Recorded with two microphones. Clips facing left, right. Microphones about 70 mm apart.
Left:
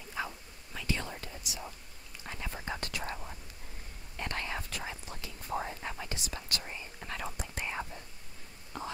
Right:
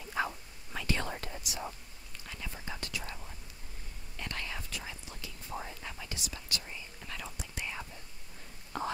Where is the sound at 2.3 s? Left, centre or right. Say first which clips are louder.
Left 4 dB; left.